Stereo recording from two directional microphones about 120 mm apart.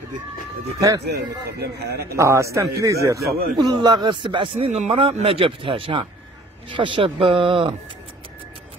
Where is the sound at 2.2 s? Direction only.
25° right (ahead or behind); by 7.7 s 45° right (ahead or behind).